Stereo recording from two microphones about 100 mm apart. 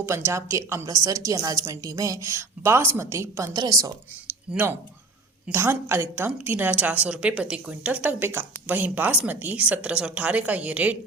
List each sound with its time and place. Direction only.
0.0 s a woman's voice: 25° right (ahead or behind)
0.9 s a woman's voice: 35° right (ahead or behind)
4.5 s a woman's voice: 20° right (ahead or behind)